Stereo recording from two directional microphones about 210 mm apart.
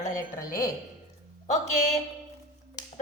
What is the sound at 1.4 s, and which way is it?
Speech, 35° left (ahead or behind).